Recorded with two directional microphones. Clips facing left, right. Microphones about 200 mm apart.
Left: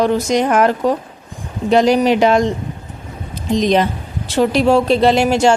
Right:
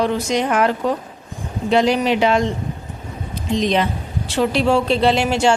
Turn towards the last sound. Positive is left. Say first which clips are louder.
# left 4 dB
turn(degrees=45)  # may be behind; listen again after turning